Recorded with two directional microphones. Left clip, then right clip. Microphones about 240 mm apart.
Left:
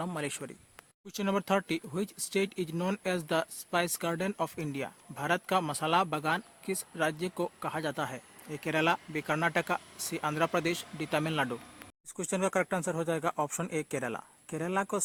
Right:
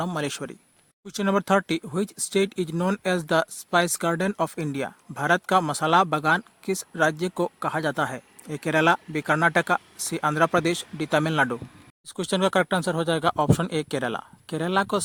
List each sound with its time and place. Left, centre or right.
0.0 s speech: right